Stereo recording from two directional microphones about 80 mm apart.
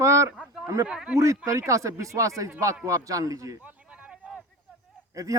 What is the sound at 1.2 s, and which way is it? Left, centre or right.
Speech, right.